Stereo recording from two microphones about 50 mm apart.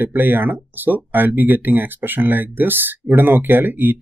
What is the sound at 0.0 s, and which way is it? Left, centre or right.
Speech, right.